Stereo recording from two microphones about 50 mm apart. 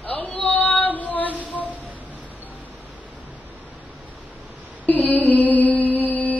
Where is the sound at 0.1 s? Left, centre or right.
Left.